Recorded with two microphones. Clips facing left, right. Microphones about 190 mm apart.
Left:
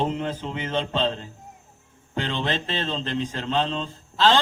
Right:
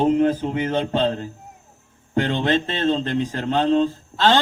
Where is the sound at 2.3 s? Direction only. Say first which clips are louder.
Right 5 dB; 50° right (ahead or behind).